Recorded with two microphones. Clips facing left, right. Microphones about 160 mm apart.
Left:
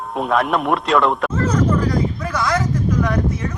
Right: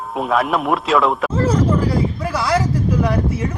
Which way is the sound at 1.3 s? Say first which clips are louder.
Right 1 dB; 30° right (ahead or behind).